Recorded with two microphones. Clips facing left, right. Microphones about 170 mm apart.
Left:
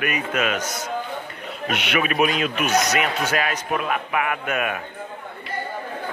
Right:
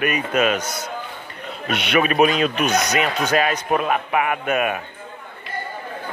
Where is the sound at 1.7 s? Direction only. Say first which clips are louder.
Right 4 dB; 35° right (ahead or behind).